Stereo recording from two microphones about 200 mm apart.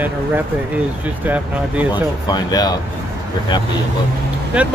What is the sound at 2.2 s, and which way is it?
Speech, 20° left (ahead or behind).